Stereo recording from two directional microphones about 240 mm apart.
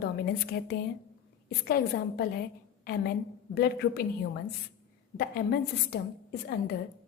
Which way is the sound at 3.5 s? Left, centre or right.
Left.